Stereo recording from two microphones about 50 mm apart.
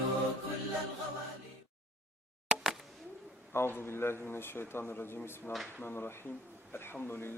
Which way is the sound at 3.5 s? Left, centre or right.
Left.